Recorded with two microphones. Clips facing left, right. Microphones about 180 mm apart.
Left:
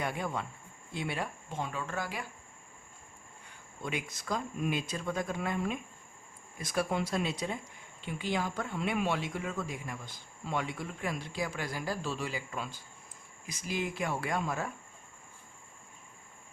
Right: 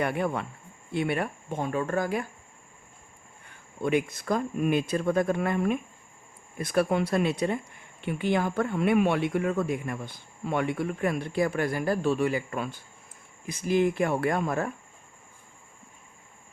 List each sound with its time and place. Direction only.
0.0 s speech: 60° right (ahead or behind)
3.8 s speech: 55° right (ahead or behind)